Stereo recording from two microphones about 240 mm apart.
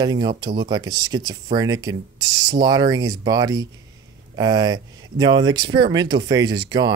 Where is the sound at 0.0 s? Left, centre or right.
Centre.